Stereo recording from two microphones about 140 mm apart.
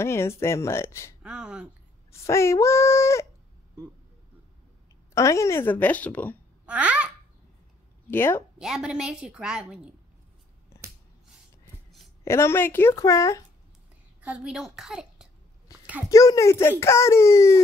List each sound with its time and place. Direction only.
0.0 s a child's voice: 20° left (ahead or behind)
1.2 s speech: 5° right (ahead or behind)
2.1 s a child's voice: 20° left (ahead or behind)
5.1 s a woman's voice: 20° left (ahead or behind)
6.6 s a child's voice: 10° right (ahead or behind)
8.1 s a woman's voice: 15° left (ahead or behind)
8.5 s a woman's voice: 5° right (ahead or behind)
12.3 s a child's voice: 20° left (ahead or behind)
14.2 s a woman's voice: 5° right (ahead or behind)
15.7 s a sound: 25° left (ahead or behind)
16.1 s a child's voice: 25° left (ahead or behind)